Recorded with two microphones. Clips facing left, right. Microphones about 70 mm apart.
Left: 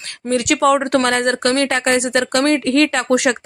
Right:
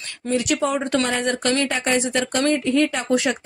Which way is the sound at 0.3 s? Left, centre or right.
Left.